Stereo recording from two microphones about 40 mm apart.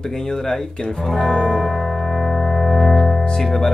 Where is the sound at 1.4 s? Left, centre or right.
Centre.